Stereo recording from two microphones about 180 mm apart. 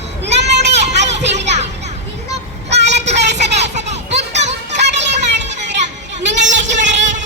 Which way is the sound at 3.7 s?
40° right (ahead or behind).